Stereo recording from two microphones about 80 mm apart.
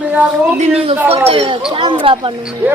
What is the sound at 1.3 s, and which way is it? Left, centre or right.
Speech, right.